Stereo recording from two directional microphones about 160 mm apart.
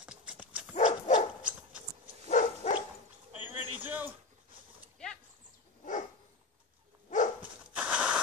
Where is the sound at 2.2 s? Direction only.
50° left (ahead or behind).